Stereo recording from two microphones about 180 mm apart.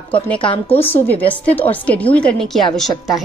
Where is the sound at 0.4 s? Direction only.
30° left (ahead or behind).